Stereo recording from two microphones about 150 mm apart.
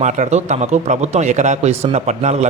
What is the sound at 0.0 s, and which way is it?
A man's voice, 50° right (ahead or behind).